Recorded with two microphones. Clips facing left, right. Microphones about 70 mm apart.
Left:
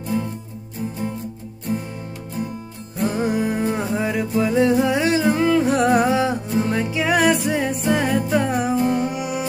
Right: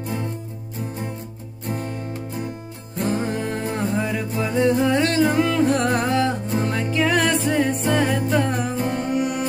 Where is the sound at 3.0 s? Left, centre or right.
Centre.